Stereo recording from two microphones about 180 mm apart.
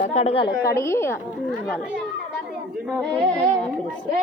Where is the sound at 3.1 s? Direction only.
5° left (ahead or behind).